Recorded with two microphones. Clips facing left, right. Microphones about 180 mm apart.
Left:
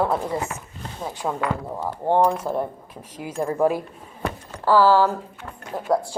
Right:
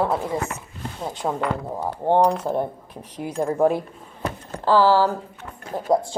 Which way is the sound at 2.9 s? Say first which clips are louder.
Right 3 dB; 5° left (ahead or behind).